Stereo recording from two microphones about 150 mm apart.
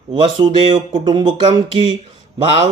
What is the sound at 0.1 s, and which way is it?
Speech, 30° right (ahead or behind).